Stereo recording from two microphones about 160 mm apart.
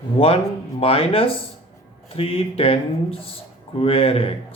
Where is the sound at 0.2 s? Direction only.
35° left (ahead or behind).